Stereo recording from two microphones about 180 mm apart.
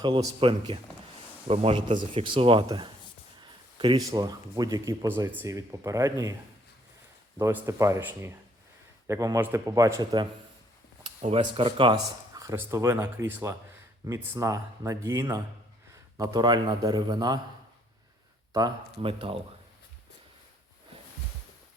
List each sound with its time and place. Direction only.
0.0 s speech: 25° right (ahead or behind)
7.3 s speech: 15° right (ahead or behind)
11.0 s speech: 35° right (ahead or behind)
18.5 s speech: 25° right (ahead or behind)